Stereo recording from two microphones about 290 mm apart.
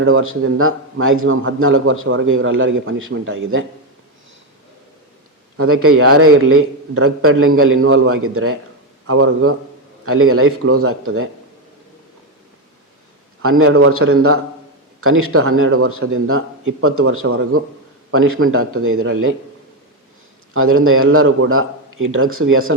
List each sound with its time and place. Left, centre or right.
0.0 s a man's voice: right
5.5 s a man's voice: right
13.4 s a man's voice: right
20.5 s a man's voice: right